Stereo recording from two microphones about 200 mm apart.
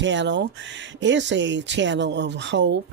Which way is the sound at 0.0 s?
65° right (ahead or behind).